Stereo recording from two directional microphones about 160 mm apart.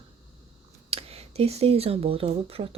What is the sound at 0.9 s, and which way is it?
Speech, 40° right (ahead or behind).